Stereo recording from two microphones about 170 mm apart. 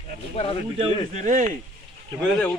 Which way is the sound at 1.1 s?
45° right (ahead or behind).